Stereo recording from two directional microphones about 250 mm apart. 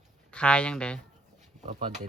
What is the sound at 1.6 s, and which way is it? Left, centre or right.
Speech, right.